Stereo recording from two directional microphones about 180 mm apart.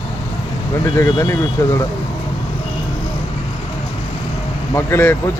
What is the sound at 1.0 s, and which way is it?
Speech, 15° left (ahead or behind).